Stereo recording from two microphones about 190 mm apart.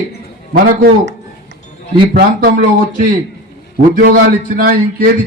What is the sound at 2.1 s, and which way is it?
Speech, 70° right (ahead or behind).